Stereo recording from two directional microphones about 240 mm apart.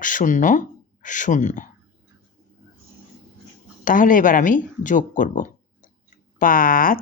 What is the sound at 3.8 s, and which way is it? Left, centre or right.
Speech, left.